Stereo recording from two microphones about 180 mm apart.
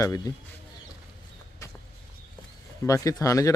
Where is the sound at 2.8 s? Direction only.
20° left (ahead or behind).